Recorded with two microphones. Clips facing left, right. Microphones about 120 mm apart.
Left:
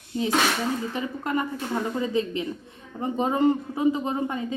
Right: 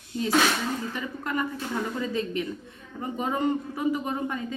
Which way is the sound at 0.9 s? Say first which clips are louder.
Left 3 dB; 25° left (ahead or behind).